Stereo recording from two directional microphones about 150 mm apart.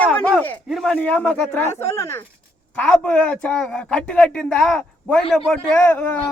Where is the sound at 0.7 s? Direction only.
Centre (ahead or behind).